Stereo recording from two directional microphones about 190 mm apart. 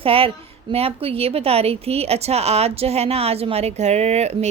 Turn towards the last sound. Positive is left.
turn(degrees=-35)  # may be behind; listen again after turning